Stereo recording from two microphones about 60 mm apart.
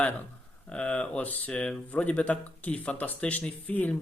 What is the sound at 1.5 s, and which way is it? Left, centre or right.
Speech, centre.